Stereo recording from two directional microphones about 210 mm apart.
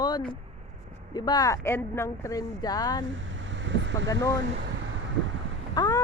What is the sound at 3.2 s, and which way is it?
Vehicle, 60° right (ahead or behind).